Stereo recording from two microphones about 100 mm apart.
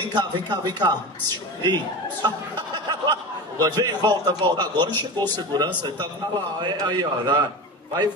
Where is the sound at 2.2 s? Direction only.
45° right (ahead or behind).